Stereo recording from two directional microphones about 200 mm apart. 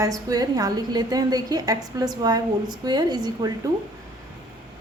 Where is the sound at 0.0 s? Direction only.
20° right (ahead or behind).